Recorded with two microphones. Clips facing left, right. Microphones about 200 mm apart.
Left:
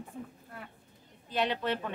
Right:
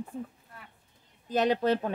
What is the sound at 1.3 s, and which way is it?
Speech, 40° right (ahead or behind).